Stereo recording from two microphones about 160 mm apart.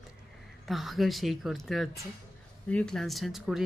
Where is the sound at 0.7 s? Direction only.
Centre (ahead or behind).